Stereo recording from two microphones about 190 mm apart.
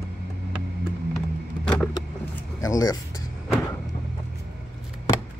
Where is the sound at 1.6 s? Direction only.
5° left (ahead or behind).